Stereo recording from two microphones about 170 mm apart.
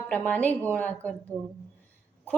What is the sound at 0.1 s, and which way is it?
A woman's voice, 10° left (ahead or behind).